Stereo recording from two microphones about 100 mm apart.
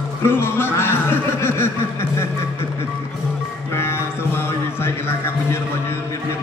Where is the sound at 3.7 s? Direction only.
25° left (ahead or behind).